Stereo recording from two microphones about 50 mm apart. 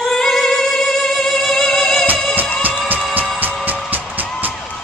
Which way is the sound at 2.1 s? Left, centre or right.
Right.